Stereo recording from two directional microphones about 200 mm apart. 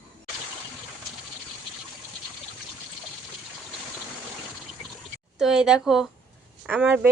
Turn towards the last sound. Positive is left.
turn(degrees=-10)  # may be behind; listen again after turning